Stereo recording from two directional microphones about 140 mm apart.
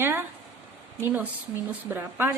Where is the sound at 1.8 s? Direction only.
15° right (ahead or behind).